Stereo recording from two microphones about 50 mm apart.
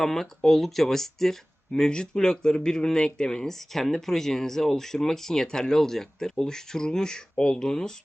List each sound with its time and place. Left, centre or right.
0.0 s speech: centre